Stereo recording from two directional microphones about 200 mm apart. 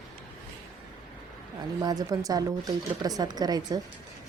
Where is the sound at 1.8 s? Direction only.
20° right (ahead or behind).